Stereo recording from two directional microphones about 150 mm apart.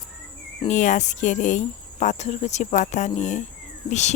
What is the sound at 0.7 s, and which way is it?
Speech, 55° left (ahead or behind).